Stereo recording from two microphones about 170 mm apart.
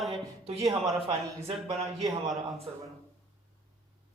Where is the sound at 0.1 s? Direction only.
35° right (ahead or behind).